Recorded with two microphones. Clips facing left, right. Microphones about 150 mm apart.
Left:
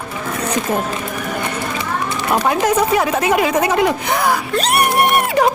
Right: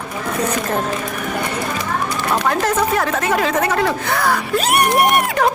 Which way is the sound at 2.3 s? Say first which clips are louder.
Left 3 dB; 10° left (ahead or behind).